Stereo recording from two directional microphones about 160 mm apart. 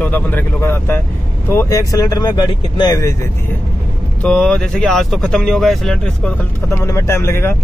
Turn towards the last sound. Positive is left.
turn(degrees=15)  # may be behind; listen again after turning